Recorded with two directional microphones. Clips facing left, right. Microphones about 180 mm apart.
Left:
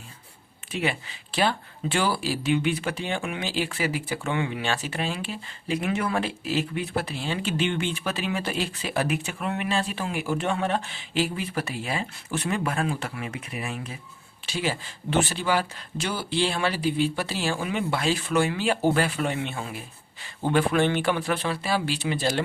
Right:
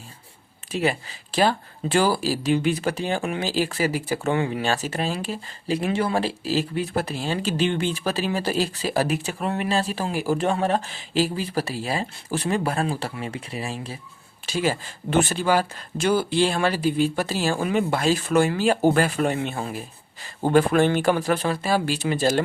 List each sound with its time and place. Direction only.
0.7 s speech: 40° right (ahead or behind)
14.4 s speech: 45° right (ahead or behind)